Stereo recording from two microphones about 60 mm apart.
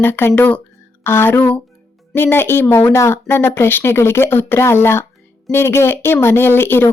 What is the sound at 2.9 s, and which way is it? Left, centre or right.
Speech, left.